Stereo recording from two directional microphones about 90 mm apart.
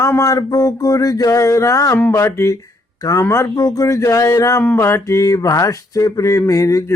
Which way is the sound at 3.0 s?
40° left (ahead or behind).